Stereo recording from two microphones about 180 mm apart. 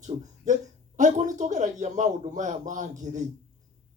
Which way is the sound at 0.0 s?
40° right (ahead or behind).